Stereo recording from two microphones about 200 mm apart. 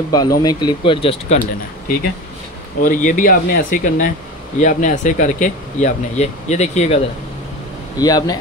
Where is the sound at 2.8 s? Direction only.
40° left (ahead or behind).